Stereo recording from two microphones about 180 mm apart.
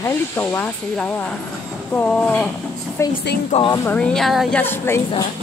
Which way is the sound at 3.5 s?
40° left (ahead or behind).